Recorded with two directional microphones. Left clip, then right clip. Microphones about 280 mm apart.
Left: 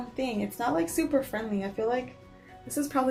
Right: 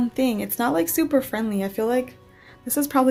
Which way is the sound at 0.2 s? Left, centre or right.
Right.